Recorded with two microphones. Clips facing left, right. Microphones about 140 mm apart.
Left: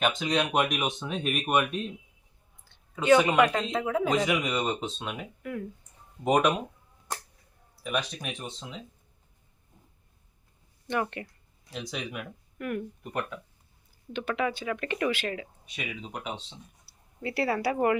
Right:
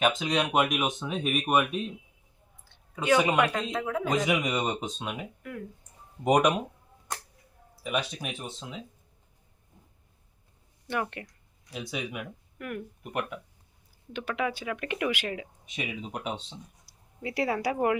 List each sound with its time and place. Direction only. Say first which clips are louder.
0.2 s a man's voice: even; centre (ahead or behind)
4.3 s speech: even; 10° right (ahead or behind)
6.2 s speech: right 1 dB; 15° right (ahead or behind)
7.9 s speech: even; 5° right (ahead or behind)
10.8 s speech: left 2 dB; 5° right (ahead or behind)
15.7 s speech: right 2 dB; 25° right (ahead or behind)
16.8 s speech: left 2 dB; 15° right (ahead or behind)